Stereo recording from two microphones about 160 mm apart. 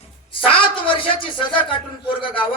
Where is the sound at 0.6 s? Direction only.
30° left (ahead or behind).